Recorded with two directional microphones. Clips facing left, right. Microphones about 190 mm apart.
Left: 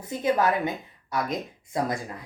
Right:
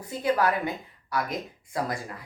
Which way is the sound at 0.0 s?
20° left (ahead or behind).